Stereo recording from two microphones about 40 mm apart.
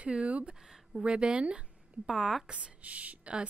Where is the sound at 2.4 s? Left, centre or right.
Right.